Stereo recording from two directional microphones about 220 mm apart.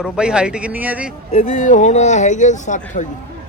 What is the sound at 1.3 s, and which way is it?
Speech, 35° left (ahead or behind).